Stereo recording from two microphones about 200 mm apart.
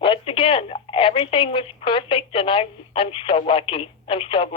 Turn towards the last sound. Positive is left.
turn(degrees=25)  # may be behind; listen again after turning